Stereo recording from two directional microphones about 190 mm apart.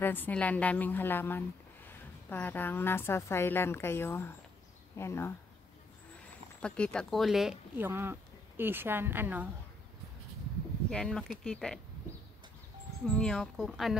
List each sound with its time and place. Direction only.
0.0 s a woman's voice: 10° left (ahead or behind)
6.6 s speech: 5° left (ahead or behind)
10.9 s speech: 5° left (ahead or behind)
13.0 s speech: 5° left (ahead or behind)